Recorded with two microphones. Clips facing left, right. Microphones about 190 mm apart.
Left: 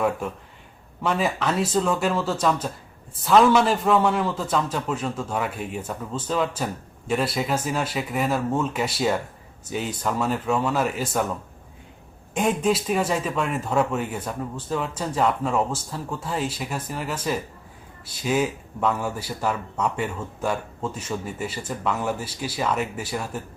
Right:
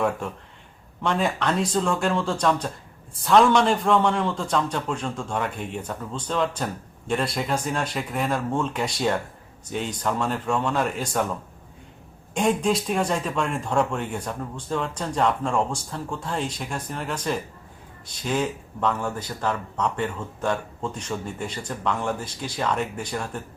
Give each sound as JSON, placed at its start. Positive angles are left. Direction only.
{"t": 1.0, "sound": "speech", "side_deg": 5}
{"t": 12.3, "sound": "speech", "side_deg": 5}